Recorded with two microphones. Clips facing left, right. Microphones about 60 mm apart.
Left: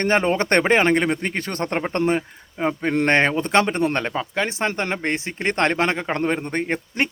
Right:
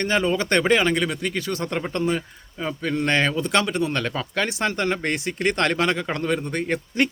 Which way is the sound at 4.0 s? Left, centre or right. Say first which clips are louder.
Left 1 dB; left.